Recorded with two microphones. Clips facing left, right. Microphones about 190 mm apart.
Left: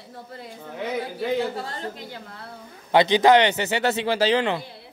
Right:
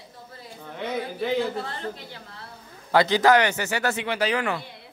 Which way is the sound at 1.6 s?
40° left (ahead or behind).